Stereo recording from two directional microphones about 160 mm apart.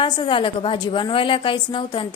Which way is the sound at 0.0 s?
30° left (ahead or behind).